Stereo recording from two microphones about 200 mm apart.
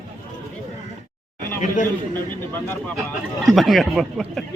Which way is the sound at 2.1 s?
10° left (ahead or behind).